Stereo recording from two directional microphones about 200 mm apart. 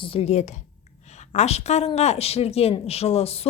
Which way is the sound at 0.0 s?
30° left (ahead or behind).